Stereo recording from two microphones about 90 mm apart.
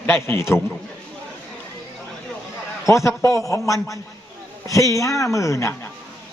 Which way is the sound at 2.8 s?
35° left (ahead or behind).